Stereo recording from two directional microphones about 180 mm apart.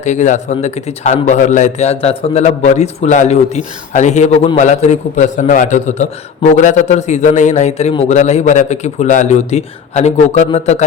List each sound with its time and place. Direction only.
0.0 s speech: 40° left (ahead or behind)